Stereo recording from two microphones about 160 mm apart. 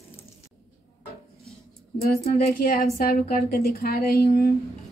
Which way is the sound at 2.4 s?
70° left (ahead or behind).